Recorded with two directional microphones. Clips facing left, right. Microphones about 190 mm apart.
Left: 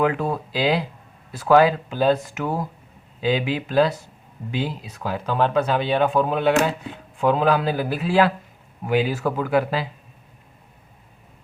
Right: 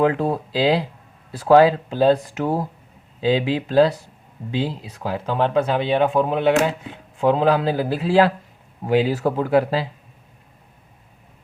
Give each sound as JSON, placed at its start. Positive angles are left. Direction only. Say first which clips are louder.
{"t": 0.0, "sound": "speech", "louder": "right 3 dB", "side_deg": -30}